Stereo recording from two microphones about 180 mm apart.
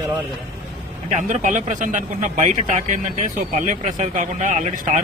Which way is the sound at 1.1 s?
45° right (ahead or behind).